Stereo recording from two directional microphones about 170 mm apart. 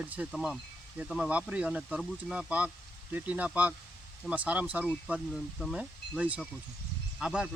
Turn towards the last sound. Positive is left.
turn(degrees=-5)  # may be behind; listen again after turning